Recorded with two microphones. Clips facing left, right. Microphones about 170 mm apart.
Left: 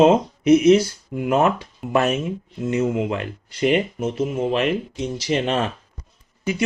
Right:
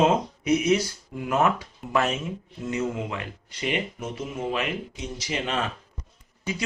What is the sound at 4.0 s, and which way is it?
Speech, 25° left (ahead or behind).